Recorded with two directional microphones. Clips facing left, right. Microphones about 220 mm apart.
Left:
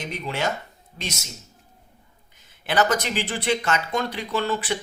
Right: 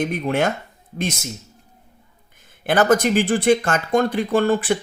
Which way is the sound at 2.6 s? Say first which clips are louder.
Right 6 dB; 50° right (ahead or behind).